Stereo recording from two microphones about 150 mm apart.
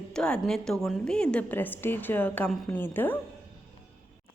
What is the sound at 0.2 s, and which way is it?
A woman's voice, 5° left (ahead or behind).